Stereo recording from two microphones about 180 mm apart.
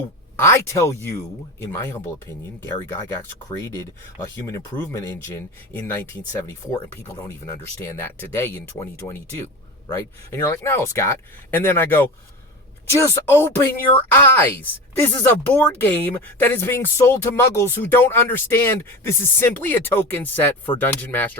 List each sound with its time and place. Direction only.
0.3 s speech: 15° left (ahead or behind)
6.5 s speech: 15° left (ahead or behind)